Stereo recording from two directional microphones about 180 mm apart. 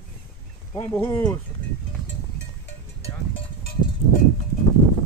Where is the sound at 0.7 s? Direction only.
10° left (ahead or behind).